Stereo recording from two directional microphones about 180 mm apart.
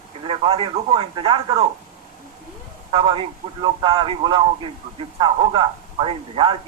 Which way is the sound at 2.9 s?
30° right (ahead or behind).